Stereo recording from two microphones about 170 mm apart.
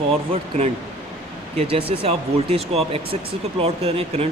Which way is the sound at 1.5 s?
35° right (ahead or behind).